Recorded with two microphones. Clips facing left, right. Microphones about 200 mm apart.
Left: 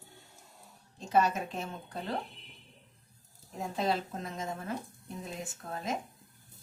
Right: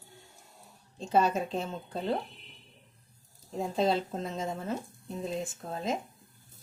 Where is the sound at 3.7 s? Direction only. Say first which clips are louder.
Right 4 dB; 25° right (ahead or behind).